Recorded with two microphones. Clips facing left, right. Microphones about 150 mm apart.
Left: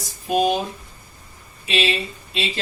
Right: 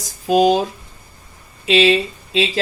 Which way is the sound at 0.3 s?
90° right.